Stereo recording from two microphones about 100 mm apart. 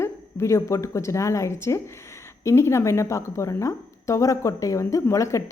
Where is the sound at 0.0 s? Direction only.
25° left (ahead or behind).